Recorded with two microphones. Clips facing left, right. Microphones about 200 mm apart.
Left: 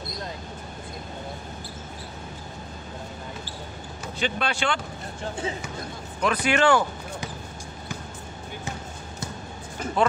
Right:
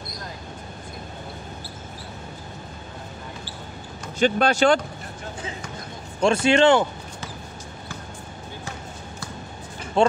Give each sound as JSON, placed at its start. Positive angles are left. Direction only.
{"t": 4.2, "sound": "speech", "side_deg": -40}
{"t": 6.2, "sound": "speech", "side_deg": -25}
{"t": 10.0, "sound": "speech", "side_deg": -25}